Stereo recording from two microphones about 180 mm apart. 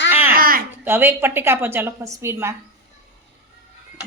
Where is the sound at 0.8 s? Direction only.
10° right (ahead or behind).